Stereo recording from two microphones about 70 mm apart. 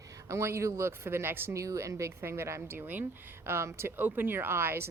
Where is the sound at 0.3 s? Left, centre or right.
Right.